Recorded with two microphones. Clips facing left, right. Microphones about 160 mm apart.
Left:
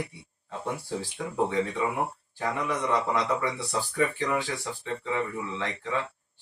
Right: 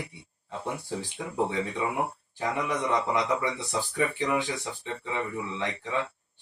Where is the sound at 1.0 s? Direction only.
15° right (ahead or behind).